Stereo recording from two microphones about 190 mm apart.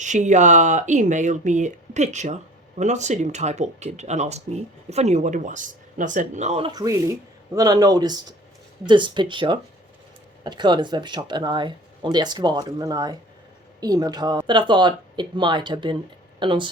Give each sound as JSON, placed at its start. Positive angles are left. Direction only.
{"t": 0.0, "sound": "speech", "side_deg": -40}
{"t": 6.7, "sound": "speech", "side_deg": -20}